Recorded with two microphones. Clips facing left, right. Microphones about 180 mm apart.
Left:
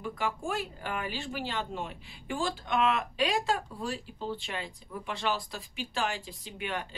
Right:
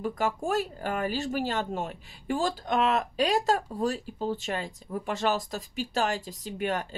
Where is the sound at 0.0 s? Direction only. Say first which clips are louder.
Right 5 dB; 40° right (ahead or behind).